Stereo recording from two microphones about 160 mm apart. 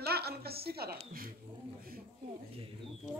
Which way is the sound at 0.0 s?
80° right.